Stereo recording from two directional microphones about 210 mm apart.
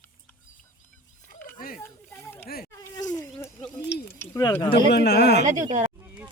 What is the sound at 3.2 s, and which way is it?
Bird, 10° left (ahead or behind).